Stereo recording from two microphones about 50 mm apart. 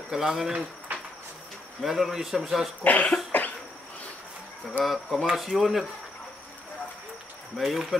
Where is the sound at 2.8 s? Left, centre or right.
Left.